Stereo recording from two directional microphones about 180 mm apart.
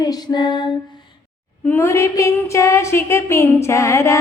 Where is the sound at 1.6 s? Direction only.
10° left (ahead or behind).